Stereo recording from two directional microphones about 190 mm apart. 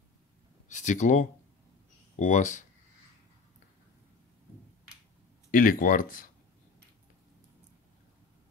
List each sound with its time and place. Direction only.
0.7 s speech: 40° left (ahead or behind)
5.5 s speech: 45° left (ahead or behind)